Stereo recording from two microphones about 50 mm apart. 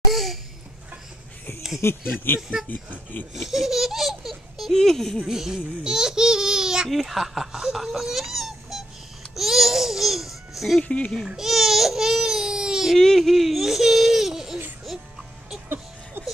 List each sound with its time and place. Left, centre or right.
0.1 s babbling: centre
1.8 s speech: left
2.3 s speech: left
3.3 s speech: centre
5.2 s a sound: centre
6.9 s speech: centre
10.8 s speech: left
11.2 s baby cry: centre
13.0 s speech: centre